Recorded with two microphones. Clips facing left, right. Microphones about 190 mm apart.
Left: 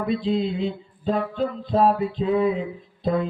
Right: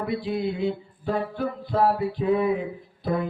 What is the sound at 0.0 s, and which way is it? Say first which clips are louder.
Music: left 3 dB; 20° left (ahead or behind).